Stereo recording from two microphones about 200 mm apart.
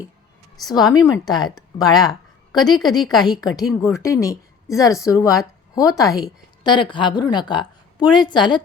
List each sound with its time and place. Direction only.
0.6 s a woman's voice: 20° left (ahead or behind)
3.0 s a woman's voice: centre (ahead or behind)
3.4 s a woman's voice: 20° left (ahead or behind)